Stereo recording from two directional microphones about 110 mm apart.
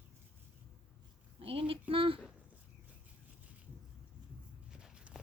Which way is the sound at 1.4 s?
55° right (ahead or behind).